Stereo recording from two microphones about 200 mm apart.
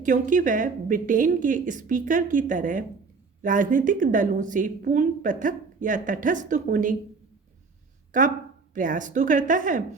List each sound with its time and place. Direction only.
0.0 s speech: 40° right (ahead or behind)
8.1 s speech: 40° right (ahead or behind)